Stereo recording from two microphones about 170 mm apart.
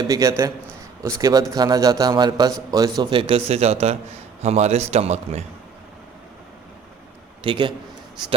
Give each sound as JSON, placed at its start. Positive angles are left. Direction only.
{"t": 0.0, "sound": "a man's voice", "side_deg": -20}
{"t": 7.4, "sound": "a man's voice", "side_deg": -30}